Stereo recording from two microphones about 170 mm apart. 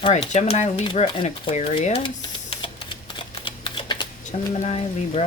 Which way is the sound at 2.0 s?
30° left (ahead or behind).